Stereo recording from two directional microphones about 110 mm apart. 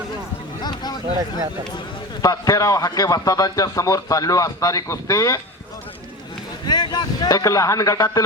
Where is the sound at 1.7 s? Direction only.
40° left (ahead or behind).